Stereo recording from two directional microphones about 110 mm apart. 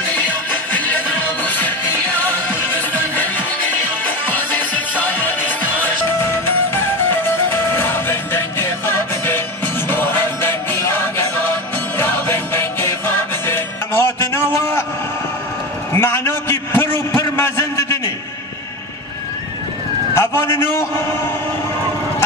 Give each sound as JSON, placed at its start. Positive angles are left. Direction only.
{"t": 0.0, "sound": "music", "side_deg": 15}
{"t": 15.9, "sound": "a sound", "side_deg": 25}
{"t": 20.2, "sound": "a man's voice", "side_deg": 25}